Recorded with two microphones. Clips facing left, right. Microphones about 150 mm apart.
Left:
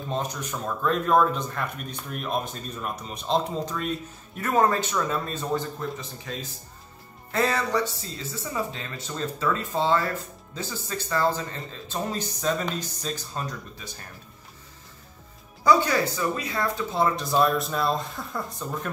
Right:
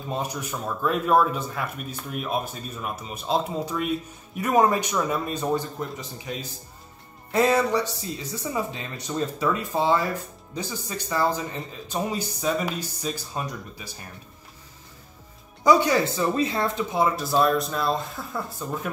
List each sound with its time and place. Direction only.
0.1 s speech: 10° right (ahead or behind)
7.3 s speech: 15° right (ahead or behind)
15.6 s speech: 15° right (ahead or behind)
16.9 s speech: 10° right (ahead or behind)